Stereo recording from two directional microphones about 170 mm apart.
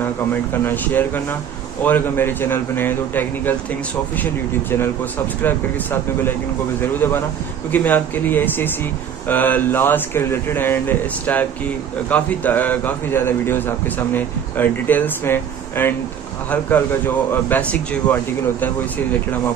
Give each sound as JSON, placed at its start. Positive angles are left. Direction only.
{"t": 0.0, "sound": "a man's voice", "side_deg": 10}
{"t": 6.8, "sound": "a man's voice", "side_deg": 15}